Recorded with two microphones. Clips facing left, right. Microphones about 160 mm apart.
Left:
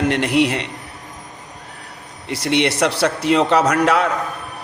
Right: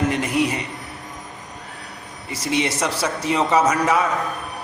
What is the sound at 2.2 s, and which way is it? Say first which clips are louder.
Speech: left 4 dB; 70° left (ahead or behind).